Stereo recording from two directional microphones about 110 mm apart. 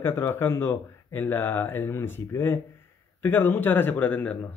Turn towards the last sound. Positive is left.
turn(degrees=15)  # may be behind; listen again after turning